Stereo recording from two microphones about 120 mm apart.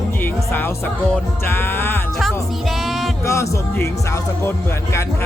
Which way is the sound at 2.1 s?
Centre (ahead or behind).